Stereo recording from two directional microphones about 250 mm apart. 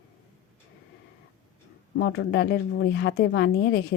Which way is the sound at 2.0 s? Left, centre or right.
Left.